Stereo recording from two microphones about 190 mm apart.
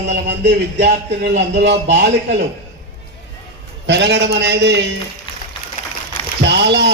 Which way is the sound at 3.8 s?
65° right (ahead or behind).